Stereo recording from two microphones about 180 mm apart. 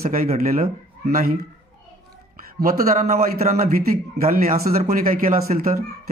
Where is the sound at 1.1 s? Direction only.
55° right (ahead or behind).